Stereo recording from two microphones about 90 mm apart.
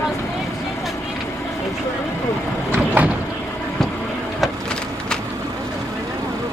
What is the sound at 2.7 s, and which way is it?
Vehicle, 20° right (ahead or behind).